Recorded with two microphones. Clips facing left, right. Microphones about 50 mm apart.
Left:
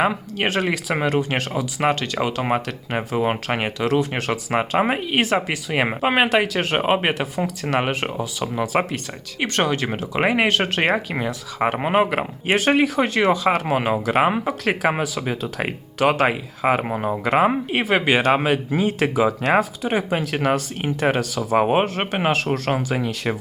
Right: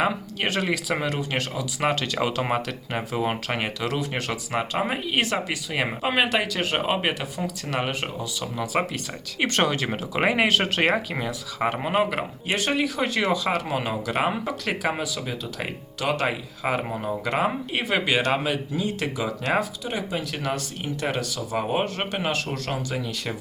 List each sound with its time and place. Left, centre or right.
0.0 s speech: centre
2.0 s speech: centre
4.1 s speech: left
9.4 s speech: centre
11.8 s speech: left
13.0 s speech: centre
13.5 s speech: left